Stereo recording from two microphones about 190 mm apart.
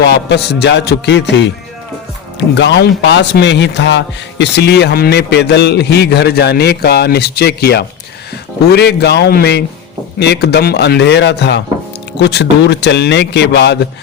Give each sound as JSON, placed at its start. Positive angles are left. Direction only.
{"t": 0.0, "sound": "speech", "side_deg": 60}